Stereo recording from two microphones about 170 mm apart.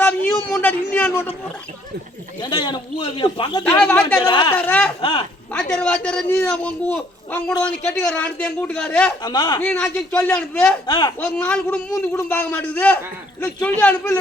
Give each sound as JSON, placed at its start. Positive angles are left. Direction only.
{"t": 0.0, "sound": "a sound", "side_deg": 10}
{"t": 2.4, "sound": "a man's voice", "side_deg": 30}
{"t": 3.7, "sound": "a child's voice", "side_deg": 10}
{"t": 4.3, "sound": "a man's voice", "side_deg": 25}
{"t": 4.5, "sound": "a child's voice", "side_deg": 10}
{"t": 9.2, "sound": "a man's voice", "side_deg": 25}
{"t": 9.6, "sound": "a child's voice", "side_deg": 10}
{"t": 10.8, "sound": "a man's voice", "side_deg": 30}
{"t": 11.2, "sound": "a child's voice", "side_deg": 10}